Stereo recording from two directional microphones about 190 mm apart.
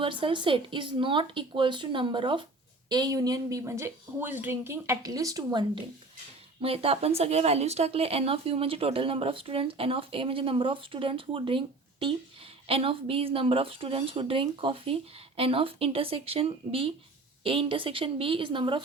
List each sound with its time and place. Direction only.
0.0 s speech: 25° right (ahead or behind)